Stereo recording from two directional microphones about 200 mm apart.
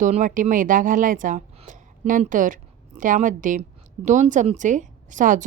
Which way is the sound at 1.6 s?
35° right (ahead or behind).